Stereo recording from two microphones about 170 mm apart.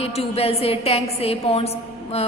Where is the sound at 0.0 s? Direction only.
35° left (ahead or behind).